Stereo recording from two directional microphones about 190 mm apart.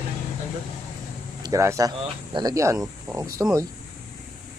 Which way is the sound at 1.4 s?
15° right (ahead or behind).